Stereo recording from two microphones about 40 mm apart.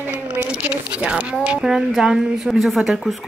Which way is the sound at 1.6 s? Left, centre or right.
Centre.